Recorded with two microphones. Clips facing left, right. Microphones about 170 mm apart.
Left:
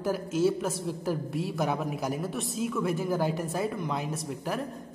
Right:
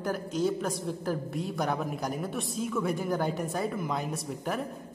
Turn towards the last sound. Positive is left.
turn(degrees=0)  # may be behind; listen again after turning